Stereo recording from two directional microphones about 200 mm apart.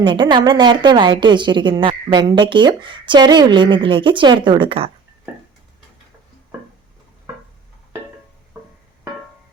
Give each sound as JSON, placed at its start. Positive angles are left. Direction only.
{"t": 0.0, "sound": "a woman's voice", "side_deg": -25}